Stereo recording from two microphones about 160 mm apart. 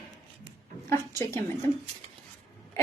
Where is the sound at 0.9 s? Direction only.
15° left (ahead or behind).